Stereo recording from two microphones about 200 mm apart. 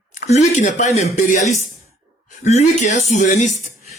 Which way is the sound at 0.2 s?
35° left (ahead or behind).